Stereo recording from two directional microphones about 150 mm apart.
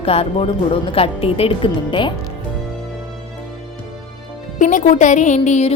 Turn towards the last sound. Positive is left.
turn(degrees=55)  # may be behind; listen again after turning